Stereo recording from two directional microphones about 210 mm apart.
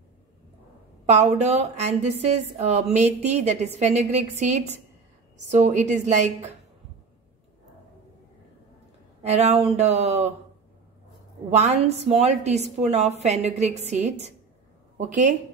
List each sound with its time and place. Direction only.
1.0 s speech: 30° right (ahead or behind)
9.2 s speech: 30° right (ahead or behind)
11.5 s speech: 30° right (ahead or behind)